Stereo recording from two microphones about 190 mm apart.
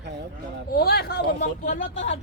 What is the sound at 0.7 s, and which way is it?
Speech, 55° left (ahead or behind).